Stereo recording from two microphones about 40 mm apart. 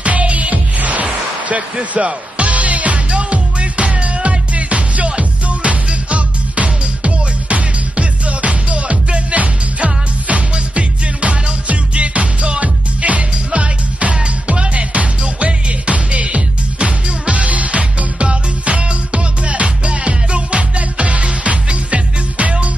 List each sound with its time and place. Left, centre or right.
0.0 s music: right
1.0 s music: right